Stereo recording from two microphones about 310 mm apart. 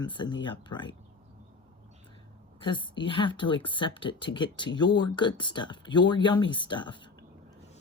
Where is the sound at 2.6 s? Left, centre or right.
Centre.